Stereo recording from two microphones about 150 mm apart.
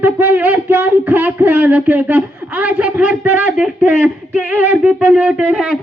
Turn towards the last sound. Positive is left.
turn(degrees=-5)  # may be behind; listen again after turning